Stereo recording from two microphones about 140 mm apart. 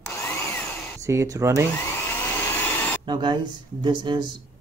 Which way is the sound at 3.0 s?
30° right (ahead or behind).